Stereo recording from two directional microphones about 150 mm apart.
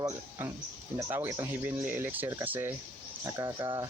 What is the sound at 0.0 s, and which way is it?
Speech, 20° right (ahead or behind).